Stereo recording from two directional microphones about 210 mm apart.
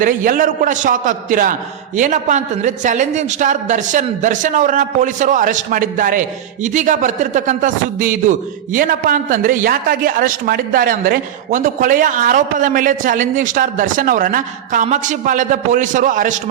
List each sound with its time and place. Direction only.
0.0 s a man's voice: 40° right (ahead or behind)